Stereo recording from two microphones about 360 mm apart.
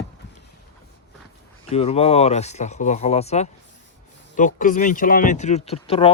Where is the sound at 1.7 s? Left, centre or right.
Centre.